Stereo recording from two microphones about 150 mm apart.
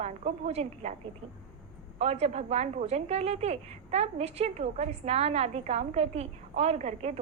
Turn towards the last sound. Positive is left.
turn(degrees=-45)  # may be behind; listen again after turning